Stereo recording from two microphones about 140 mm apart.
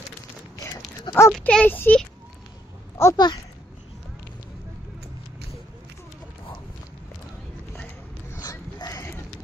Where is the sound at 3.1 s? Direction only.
30° left (ahead or behind).